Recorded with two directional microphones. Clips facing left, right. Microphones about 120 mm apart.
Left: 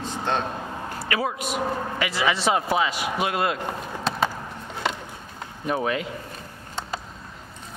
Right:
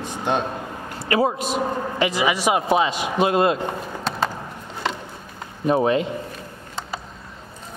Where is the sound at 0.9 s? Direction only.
30° right (ahead or behind).